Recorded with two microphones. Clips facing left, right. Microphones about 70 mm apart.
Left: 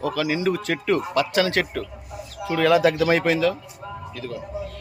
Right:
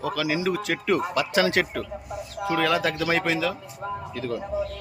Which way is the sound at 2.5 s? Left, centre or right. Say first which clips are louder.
Left 6 dB; centre.